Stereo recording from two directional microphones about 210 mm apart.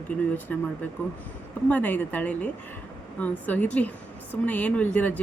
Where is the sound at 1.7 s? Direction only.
10° left (ahead or behind).